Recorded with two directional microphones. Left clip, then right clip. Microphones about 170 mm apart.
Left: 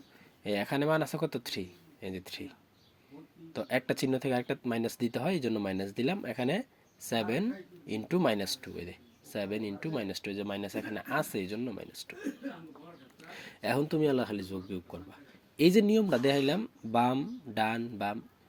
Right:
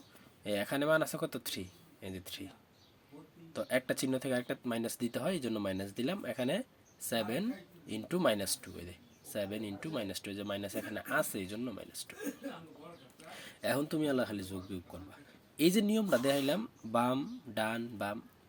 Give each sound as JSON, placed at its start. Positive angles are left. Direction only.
{"t": 0.4, "sound": "speech", "side_deg": 20}
{"t": 3.5, "sound": "speech", "side_deg": 20}
{"t": 13.3, "sound": "speech", "side_deg": 20}